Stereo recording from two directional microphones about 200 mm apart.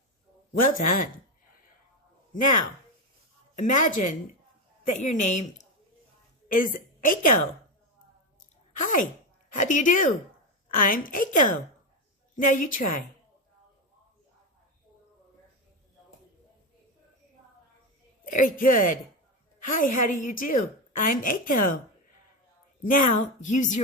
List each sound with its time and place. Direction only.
0.6 s a woman's voice: 45° left (ahead or behind)
3.5 s a woman's voice: 40° left (ahead or behind)
8.8 s a woman's voice: 40° left (ahead or behind)
18.3 s a woman's voice: 40° left (ahead or behind)
22.8 s a woman's voice: 45° left (ahead or behind)